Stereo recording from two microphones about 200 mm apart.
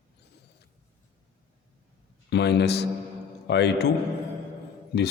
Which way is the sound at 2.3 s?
60° left (ahead or behind).